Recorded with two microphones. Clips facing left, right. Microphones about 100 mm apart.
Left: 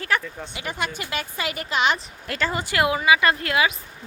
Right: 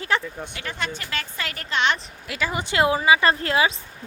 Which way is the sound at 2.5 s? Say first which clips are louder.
Right 2 dB; 20° right (ahead or behind).